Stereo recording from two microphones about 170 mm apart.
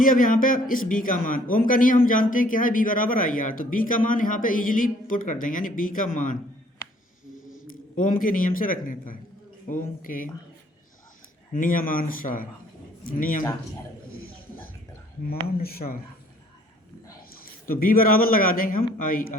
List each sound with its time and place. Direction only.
0.0 s a man's voice: 55° left (ahead or behind)
7.9 s a man's voice: 55° left (ahead or behind)
11.5 s speech: 55° left (ahead or behind)
15.3 s speech: 60° left (ahead or behind)
17.3 s speech: 60° left (ahead or behind)